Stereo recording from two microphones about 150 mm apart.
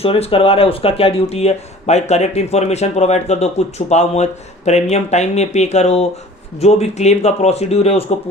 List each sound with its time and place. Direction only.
0.0 s speech: 40° left (ahead or behind)